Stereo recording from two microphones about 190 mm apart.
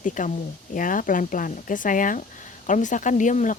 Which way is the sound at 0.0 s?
45° left (ahead or behind).